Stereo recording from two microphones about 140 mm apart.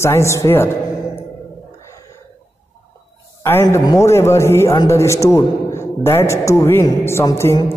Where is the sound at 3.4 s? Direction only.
20° left (ahead or behind).